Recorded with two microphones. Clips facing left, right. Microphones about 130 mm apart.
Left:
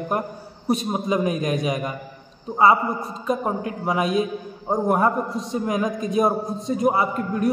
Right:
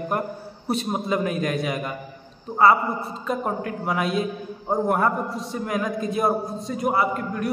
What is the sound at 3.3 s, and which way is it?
A man's voice, 20° left (ahead or behind).